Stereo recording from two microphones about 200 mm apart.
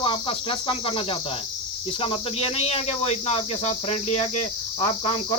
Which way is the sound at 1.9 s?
25° left (ahead or behind).